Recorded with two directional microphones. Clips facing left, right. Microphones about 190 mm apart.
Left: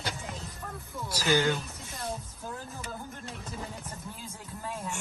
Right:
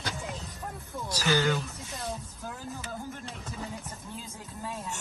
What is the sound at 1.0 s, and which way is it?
Speech, 15° left (ahead or behind).